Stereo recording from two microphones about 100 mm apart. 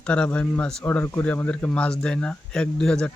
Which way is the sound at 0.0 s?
10° left (ahead or behind).